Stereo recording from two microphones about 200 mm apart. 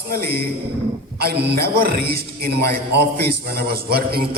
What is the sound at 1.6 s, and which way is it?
A man's voice, 50° right (ahead or behind).